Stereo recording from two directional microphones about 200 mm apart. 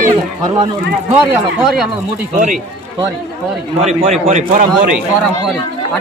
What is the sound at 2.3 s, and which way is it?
Speech, 40° right (ahead or behind).